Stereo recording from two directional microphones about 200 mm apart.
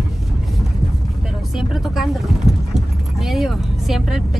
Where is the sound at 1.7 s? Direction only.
Centre (ahead or behind).